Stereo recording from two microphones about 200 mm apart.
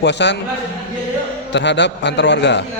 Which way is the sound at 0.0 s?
60° left (ahead or behind).